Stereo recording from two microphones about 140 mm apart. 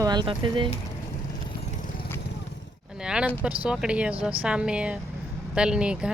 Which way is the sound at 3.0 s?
5° right (ahead or behind).